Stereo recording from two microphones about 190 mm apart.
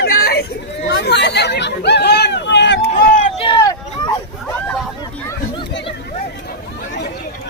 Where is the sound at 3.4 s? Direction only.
25° left (ahead or behind).